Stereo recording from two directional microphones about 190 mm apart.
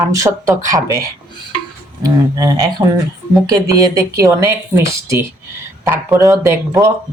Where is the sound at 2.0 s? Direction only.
20° right (ahead or behind).